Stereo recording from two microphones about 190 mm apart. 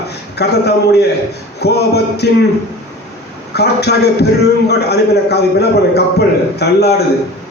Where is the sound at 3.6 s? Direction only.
60° left (ahead or behind).